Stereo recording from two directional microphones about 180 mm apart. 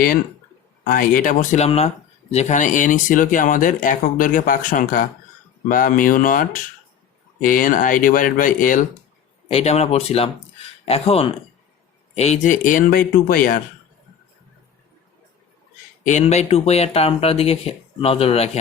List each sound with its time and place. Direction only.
0.9 s speech: 50° left (ahead or behind)
9.5 s speech: 35° left (ahead or behind); by 13.6 s 50° left (ahead or behind)
16.0 s speech: 40° left (ahead or behind)